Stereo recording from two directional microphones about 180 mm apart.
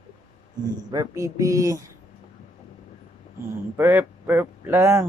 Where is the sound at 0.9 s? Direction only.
20° right (ahead or behind).